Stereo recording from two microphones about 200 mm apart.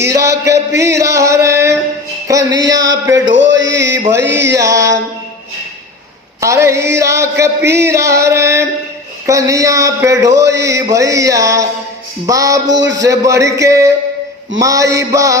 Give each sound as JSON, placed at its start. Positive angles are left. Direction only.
{"t": 0.0, "sound": "a sound", "side_deg": -15}
{"t": 0.8, "sound": "music", "side_deg": -15}
{"t": 3.2, "sound": "a sound", "side_deg": -70}
{"t": 4.2, "sound": "music", "side_deg": -60}
{"t": 4.5, "sound": "music", "side_deg": -15}
{"t": 6.4, "sound": "music", "side_deg": -15}